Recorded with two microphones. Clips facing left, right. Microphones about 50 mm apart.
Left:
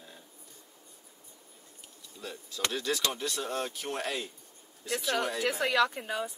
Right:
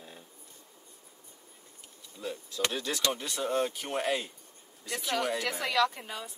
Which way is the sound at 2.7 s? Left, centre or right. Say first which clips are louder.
Left 3 dB; centre.